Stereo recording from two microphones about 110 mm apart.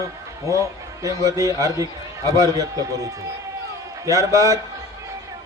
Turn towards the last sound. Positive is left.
turn(degrees=-30)  # may be behind; listen again after turning